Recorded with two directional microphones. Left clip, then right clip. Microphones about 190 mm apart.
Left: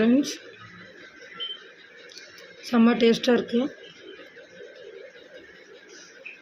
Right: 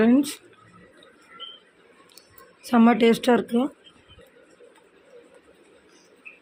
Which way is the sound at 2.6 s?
15° right (ahead or behind).